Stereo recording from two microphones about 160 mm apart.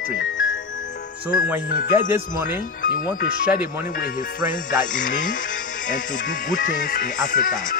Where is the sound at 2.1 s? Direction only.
15° right (ahead or behind).